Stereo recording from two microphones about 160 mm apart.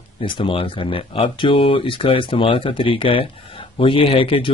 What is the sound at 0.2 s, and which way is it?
Speech, 35° left (ahead or behind).